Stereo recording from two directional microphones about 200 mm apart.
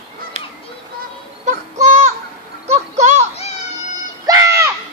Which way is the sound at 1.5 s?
35° right (ahead or behind).